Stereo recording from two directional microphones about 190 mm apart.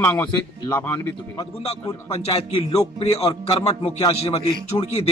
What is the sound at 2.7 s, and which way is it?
A man's voice, 35° left (ahead or behind).